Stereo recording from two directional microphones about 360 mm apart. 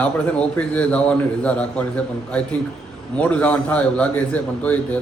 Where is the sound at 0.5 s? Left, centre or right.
Centre.